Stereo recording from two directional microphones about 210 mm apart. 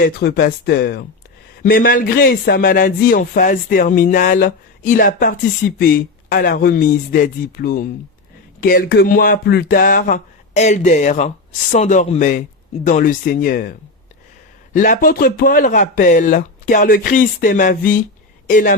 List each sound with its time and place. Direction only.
0.0 s a man's voice: 45° left (ahead or behind)